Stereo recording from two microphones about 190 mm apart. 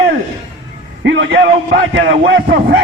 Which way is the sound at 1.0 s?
70° right (ahead or behind).